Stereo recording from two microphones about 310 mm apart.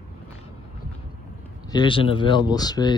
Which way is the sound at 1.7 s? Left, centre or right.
Centre.